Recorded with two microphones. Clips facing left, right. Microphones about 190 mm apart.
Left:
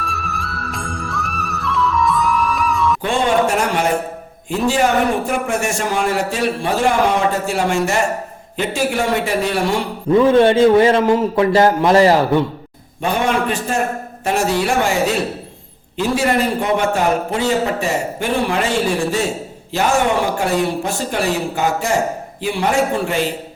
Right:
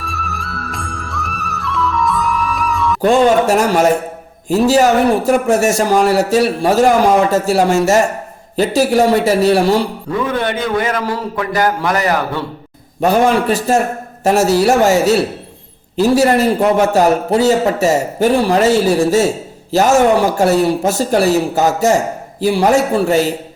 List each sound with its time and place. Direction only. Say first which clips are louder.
0.0 s music: even; centre (ahead or behind)
3.0 s a man's voice: right 9 dB; 40° right (ahead or behind)
10.1 s a man's voice: left 10 dB; 25° left (ahead or behind)
13.0 s a man's voice: right 6 dB; 40° right (ahead or behind)